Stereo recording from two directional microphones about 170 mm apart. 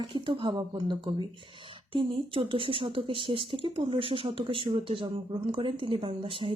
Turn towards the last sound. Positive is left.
turn(degrees=-30)  # may be behind; listen again after turning